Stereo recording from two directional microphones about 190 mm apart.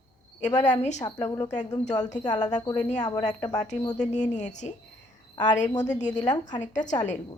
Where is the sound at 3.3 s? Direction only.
20° left (ahead or behind).